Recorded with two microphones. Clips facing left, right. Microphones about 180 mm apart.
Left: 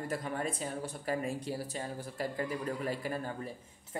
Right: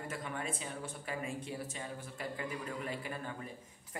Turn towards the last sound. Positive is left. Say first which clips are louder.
# left 5 dB
turn(degrees=40)  # may be behind; listen again after turning